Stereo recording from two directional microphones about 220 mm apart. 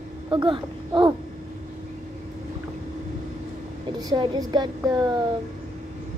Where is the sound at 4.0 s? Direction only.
20° right (ahead or behind).